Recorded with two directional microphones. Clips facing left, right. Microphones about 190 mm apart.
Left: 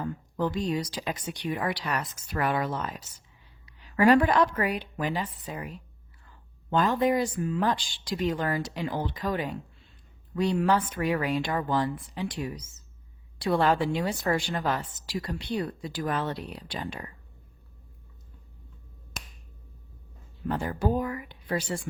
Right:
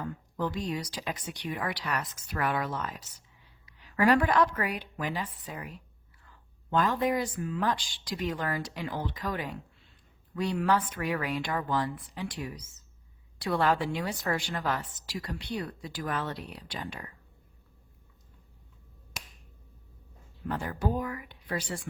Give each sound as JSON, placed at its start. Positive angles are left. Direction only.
{"t": 0.0, "sound": "a woman's voice", "side_deg": 30}
{"t": 3.9, "sound": "a woman's voice", "side_deg": 25}
{"t": 20.5, "sound": "a woman's voice", "side_deg": 30}